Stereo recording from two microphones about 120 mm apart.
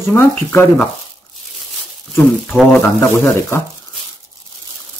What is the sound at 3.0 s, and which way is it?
Speech, 20° left (ahead or behind).